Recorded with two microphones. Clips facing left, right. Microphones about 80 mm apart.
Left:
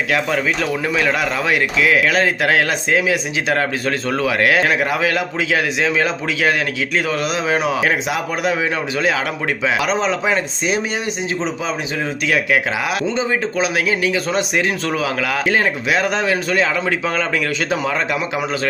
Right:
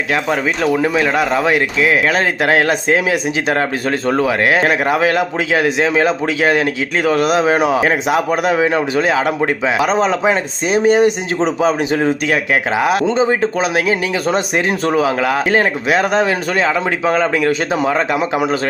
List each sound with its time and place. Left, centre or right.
0.1 s speech: right